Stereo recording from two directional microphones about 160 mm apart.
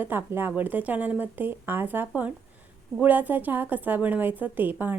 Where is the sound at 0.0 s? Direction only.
10° right (ahead or behind).